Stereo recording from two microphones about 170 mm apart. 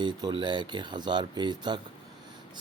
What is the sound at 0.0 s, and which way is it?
Speech, 25° right (ahead or behind).